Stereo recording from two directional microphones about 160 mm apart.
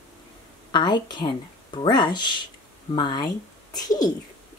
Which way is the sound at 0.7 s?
30° left (ahead or behind).